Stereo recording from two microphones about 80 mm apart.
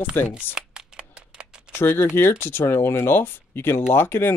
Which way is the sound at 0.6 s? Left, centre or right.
Centre.